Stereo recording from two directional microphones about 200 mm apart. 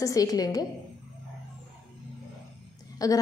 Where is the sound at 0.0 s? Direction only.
15° left (ahead or behind).